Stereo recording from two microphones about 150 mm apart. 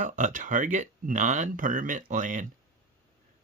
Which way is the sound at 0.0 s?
60° right (ahead or behind).